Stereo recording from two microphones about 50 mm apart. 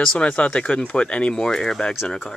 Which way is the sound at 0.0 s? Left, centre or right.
Centre.